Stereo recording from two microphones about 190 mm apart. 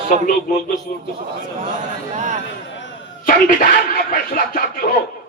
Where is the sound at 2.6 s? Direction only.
75° left (ahead or behind).